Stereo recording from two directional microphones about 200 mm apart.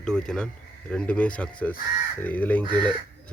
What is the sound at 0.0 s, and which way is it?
Speech, 5° left (ahead or behind).